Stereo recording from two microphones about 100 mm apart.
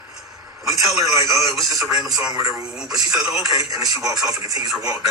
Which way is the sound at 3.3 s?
35° right (ahead or behind).